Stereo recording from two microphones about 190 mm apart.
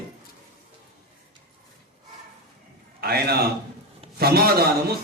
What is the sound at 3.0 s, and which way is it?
A man's voice, 55° right (ahead or behind).